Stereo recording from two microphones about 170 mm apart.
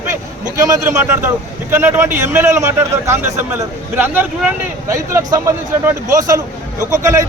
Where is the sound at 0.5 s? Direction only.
20° right (ahead or behind).